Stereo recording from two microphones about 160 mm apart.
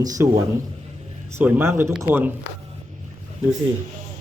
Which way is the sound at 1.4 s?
15° right (ahead or behind).